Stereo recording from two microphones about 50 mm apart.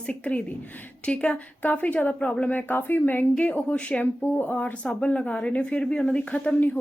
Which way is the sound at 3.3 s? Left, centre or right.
Left.